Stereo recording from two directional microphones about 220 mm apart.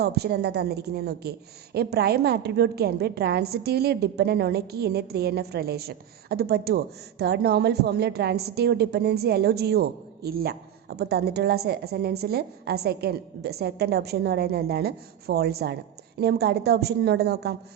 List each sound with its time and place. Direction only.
0.0 s a woman's voice: 45° right (ahead or behind)